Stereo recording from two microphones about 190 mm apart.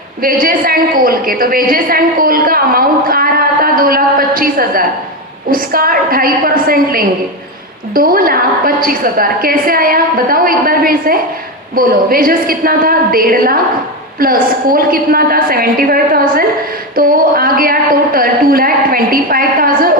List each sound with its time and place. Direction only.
0.2 s a woman's voice: 50° right (ahead or behind)